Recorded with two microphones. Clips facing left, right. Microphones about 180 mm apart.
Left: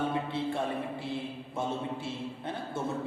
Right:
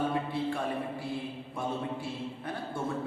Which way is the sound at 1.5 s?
25° left (ahead or behind).